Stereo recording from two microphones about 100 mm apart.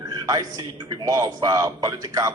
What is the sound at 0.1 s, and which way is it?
A man's voice, 40° right (ahead or behind).